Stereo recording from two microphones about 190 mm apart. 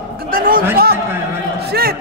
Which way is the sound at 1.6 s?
55° right (ahead or behind).